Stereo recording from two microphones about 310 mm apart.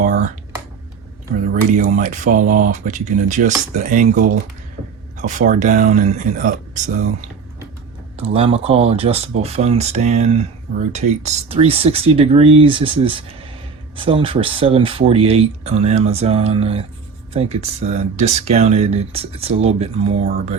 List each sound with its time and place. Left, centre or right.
0.0 s computer keyboard: right
1.7 s speech: right